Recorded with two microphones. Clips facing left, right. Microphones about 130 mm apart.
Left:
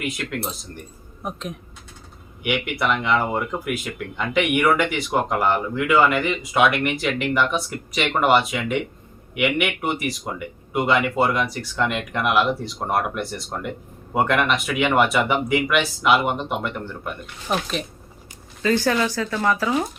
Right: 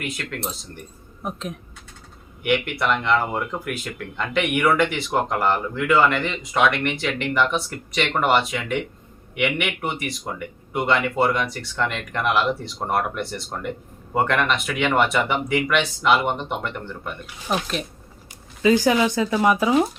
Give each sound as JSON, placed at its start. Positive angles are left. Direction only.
{"t": 0.0, "sound": "speech", "side_deg": 5}
{"t": 18.6, "sound": "speech", "side_deg": -15}